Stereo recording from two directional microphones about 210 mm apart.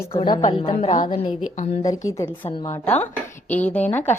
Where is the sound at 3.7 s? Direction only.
10° left (ahead or behind).